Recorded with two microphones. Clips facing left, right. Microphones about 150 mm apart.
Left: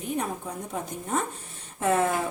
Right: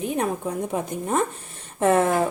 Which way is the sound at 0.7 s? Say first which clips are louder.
Right 2 dB; 65° right (ahead or behind).